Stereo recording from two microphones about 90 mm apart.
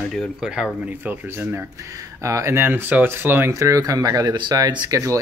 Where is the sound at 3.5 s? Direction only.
35° right (ahead or behind).